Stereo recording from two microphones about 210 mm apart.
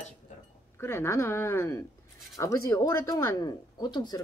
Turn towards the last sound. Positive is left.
turn(degrees=20)  # may be behind; listen again after turning